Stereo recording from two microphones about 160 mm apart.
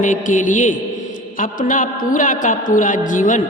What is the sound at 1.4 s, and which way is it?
A woman's voice, 55° left (ahead or behind).